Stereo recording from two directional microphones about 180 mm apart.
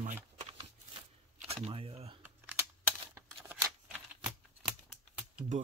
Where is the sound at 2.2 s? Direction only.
10° right (ahead or behind).